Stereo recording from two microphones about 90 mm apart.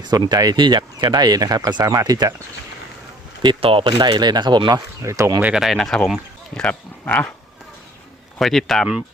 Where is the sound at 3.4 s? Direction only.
75° right (ahead or behind); by 5.1 s 45° right (ahead or behind).